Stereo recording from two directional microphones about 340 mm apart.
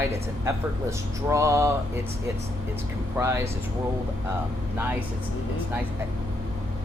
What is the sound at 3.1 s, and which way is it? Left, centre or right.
Speech, centre.